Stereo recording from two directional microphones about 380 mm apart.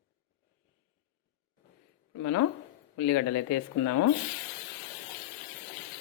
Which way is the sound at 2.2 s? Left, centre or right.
Left.